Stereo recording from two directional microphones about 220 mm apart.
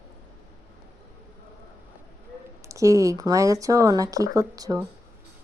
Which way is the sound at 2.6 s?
15° right (ahead or behind).